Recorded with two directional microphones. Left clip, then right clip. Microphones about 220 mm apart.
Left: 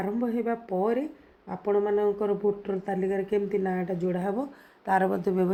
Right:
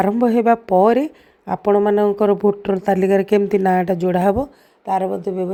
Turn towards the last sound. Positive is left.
turn(degrees=-5)  # may be behind; listen again after turning